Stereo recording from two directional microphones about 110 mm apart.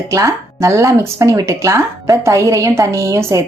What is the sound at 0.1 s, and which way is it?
Speech, 30° right (ahead or behind).